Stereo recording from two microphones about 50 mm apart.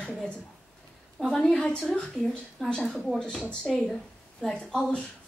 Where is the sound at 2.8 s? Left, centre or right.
Centre.